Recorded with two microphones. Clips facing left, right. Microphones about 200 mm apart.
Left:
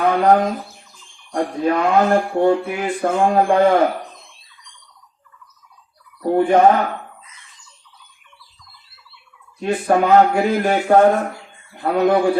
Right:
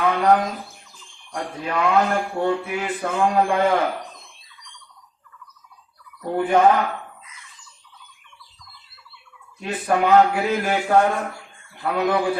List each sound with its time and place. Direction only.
0.0 s speech: 45° left (ahead or behind)
6.2 s speech: 40° left (ahead or behind)
9.6 s a man's voice: 40° left (ahead or behind)